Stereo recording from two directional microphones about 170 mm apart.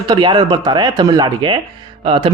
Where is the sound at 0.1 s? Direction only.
25° right (ahead or behind).